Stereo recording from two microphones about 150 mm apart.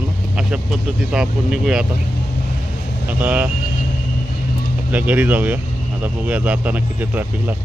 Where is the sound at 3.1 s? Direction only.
10° right (ahead or behind).